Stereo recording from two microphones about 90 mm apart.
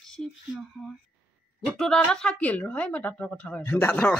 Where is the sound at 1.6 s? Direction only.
5° left (ahead or behind).